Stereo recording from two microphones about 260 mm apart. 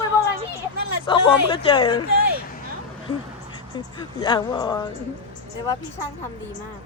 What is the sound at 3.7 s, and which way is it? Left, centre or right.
Speech, centre.